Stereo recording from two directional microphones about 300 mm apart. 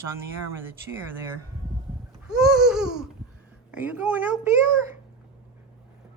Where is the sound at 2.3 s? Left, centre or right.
Centre.